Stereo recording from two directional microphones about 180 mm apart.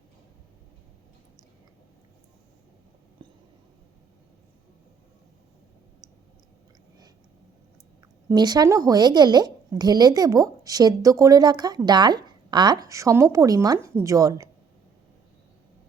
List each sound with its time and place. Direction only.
8.3 s a woman's voice: 20° right (ahead or behind)